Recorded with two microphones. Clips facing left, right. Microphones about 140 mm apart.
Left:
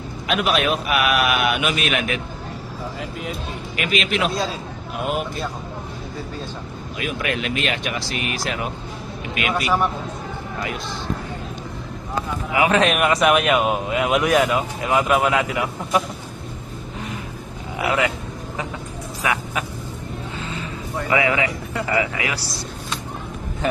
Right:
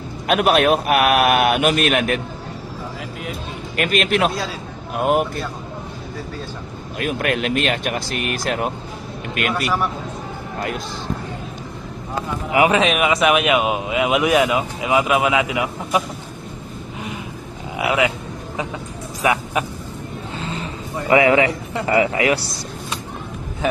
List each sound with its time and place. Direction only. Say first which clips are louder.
0.3 s a man's voice: right 5 dB; 50° right (ahead or behind)
3.8 s a man's voice: right 4 dB; 45° right (ahead or behind)
7.2 s a man's voice: right 4 dB; 50° right (ahead or behind)
9.5 s a man's voice: left 1 dB; centre (ahead or behind)
12.8 s a man's voice: even; centre (ahead or behind)
17.7 s a sound: right 2 dB; 10° right (ahead or behind)
19.2 s vehicle: right 5 dB; 20° right (ahead or behind)
21.1 s speech: right 6 dB; 30° right (ahead or behind)